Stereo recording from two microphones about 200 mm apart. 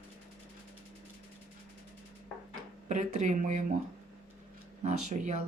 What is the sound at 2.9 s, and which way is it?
Speech, 35° right (ahead or behind).